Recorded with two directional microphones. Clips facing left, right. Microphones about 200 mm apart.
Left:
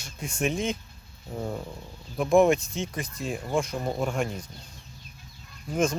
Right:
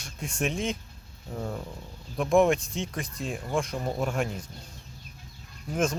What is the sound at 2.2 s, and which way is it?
Speech, centre (ahead or behind).